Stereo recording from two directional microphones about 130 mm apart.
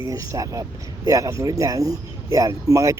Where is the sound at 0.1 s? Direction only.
25° right (ahead or behind).